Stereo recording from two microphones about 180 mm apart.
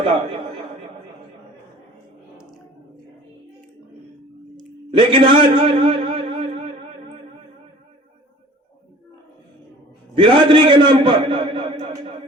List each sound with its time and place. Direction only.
0.0 s a man's voice: 30° right (ahead or behind)
4.9 s a man's voice: 30° right (ahead or behind)
10.2 s a man's voice: 30° right (ahead or behind)